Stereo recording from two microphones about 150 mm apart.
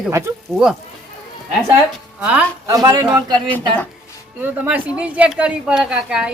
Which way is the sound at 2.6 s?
25° right (ahead or behind).